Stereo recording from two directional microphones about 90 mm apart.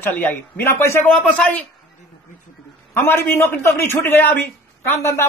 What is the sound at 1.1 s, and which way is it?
Speech, 10° left (ahead or behind).